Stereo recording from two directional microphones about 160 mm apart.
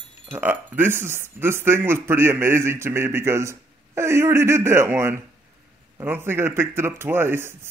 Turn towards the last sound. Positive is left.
turn(degrees=-15)  # may be behind; listen again after turning